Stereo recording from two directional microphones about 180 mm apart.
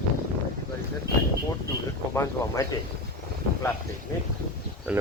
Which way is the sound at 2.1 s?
15° left (ahead or behind).